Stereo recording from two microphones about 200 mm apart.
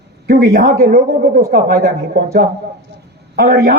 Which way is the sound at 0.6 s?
50° right (ahead or behind).